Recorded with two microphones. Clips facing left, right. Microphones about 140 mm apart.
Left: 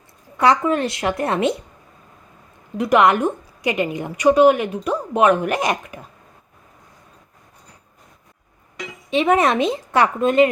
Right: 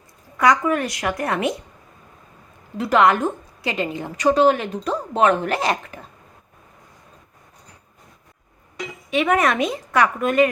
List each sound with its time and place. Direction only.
0.3 s a woman's voice: 30° left (ahead or behind)
2.7 s a woman's voice: 20° left (ahead or behind)
9.0 s a woman's voice: 25° left (ahead or behind)